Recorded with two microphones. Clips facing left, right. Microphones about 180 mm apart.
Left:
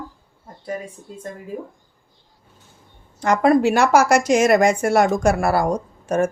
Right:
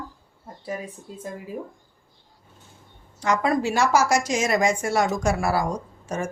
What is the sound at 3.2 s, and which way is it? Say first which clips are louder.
A woman's voice: left 7 dB; 55° left (ahead or behind).